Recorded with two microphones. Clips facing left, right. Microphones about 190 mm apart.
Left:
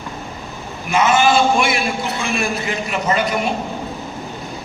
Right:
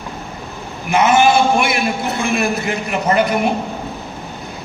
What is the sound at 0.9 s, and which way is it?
A man's voice, 60° right (ahead or behind).